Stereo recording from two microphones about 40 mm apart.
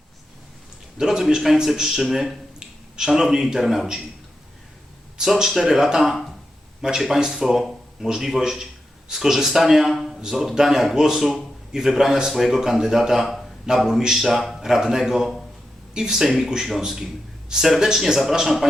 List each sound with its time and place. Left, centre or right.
0.9 s a man's voice: centre
2.6 s a sound: centre
3.3 s a man's voice: centre
5.2 s a man's voice: centre
9.9 s a sound: centre
10.2 s a man's voice: centre